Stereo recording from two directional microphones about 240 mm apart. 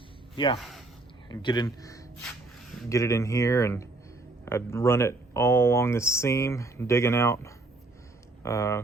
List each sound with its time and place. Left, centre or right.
0.3 s speech: centre